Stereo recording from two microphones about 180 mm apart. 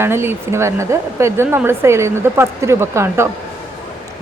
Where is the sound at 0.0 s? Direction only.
15° right (ahead or behind).